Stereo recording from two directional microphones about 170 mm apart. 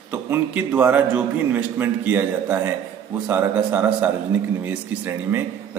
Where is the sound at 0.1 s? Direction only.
10° right (ahead or behind).